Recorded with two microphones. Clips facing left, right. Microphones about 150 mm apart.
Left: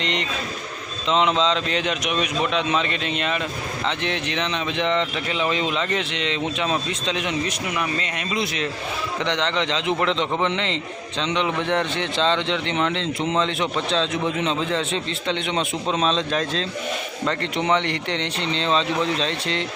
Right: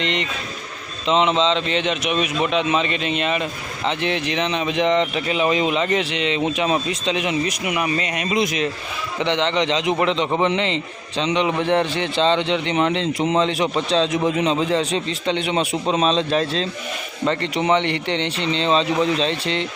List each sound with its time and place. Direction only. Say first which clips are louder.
0.0 s a man's voice: right 2 dB; centre (ahead or behind)
9.2 s speech: right 5 dB; 5° right (ahead or behind)
11.5 s a man's voice: right 4 dB; 35° right (ahead or behind)
11.9 s a man's voice: right 3 dB; 5° right (ahead or behind)
13.7 s a man's voice: right 4 dB; 35° right (ahead or behind)
14.4 s a man's voice: right 4 dB; 5° right (ahead or behind)